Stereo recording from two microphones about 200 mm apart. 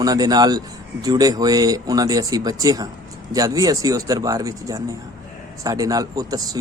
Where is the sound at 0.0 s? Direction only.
20° right (ahead or behind).